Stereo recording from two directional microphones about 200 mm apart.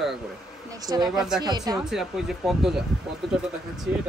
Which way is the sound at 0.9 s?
20° right (ahead or behind).